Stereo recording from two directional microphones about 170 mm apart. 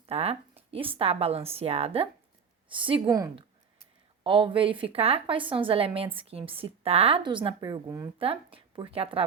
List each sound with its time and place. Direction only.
0.0 s a woman's voice: 35° right (ahead or behind); by 8.1 s 20° right (ahead or behind)
8.2 s a woman's voice: 30° right (ahead or behind)